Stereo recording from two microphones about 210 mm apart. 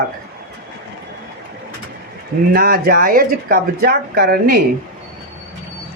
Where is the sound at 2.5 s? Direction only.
45° right (ahead or behind).